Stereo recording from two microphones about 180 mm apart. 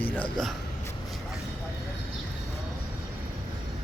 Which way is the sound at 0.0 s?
10° left (ahead or behind).